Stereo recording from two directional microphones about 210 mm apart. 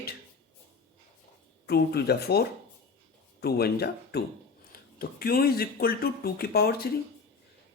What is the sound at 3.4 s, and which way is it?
Speech, 50° left (ahead or behind).